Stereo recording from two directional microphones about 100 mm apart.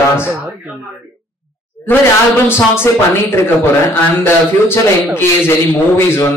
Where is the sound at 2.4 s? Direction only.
25° left (ahead or behind).